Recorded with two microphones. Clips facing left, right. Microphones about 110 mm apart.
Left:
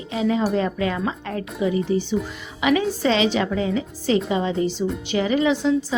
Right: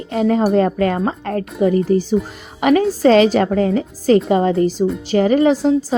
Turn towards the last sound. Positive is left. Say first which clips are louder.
# right 6 dB
turn(degrees=-40)  # may be behind; listen again after turning